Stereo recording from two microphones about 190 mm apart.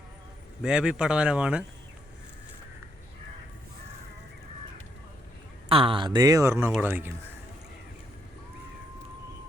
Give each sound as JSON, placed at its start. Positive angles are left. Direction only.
{"t": 0.6, "sound": "speech", "side_deg": -5}
{"t": 5.6, "sound": "speech", "side_deg": -30}